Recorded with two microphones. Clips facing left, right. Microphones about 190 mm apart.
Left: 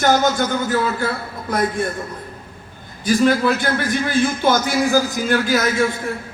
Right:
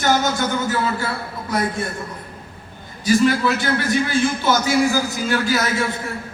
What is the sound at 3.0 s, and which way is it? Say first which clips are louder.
A man's voice: left 1 dB; 50° left (ahead or behind).